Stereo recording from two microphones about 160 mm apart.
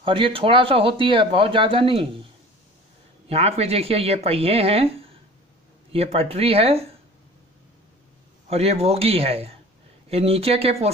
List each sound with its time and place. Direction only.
0.0 s speech: 35° right (ahead or behind)
3.3 s speech: 40° right (ahead or behind)
8.5 s speech: 40° right (ahead or behind)